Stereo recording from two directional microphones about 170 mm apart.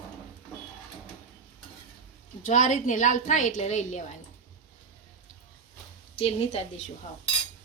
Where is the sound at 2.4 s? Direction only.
45° left (ahead or behind).